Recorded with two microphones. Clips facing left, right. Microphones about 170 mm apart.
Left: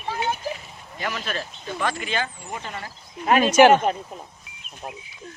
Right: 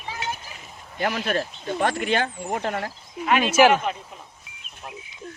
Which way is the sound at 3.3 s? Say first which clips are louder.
Left 3 dB; 45° left (ahead or behind).